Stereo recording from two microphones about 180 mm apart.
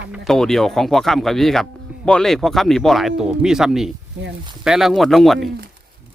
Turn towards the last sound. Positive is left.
turn(degrees=0)  # may be behind; listen again after turning